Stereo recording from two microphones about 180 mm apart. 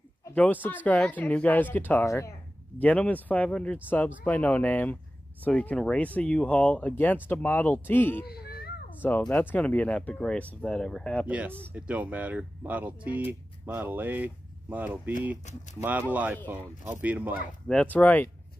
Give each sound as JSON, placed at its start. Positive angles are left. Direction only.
{"t": 0.2, "sound": "speech", "side_deg": 10}
{"t": 8.3, "sound": "a sound", "side_deg": 60}
{"t": 9.0, "sound": "speech", "side_deg": 10}
{"t": 11.2, "sound": "speech", "side_deg": -10}
{"t": 15.5, "sound": "speech", "side_deg": 40}
{"t": 15.8, "sound": "speech", "side_deg": -10}
{"t": 17.6, "sound": "speech", "side_deg": 10}